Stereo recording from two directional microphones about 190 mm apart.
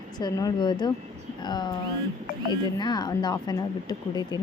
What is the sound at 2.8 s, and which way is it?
Speech, 20° left (ahead or behind).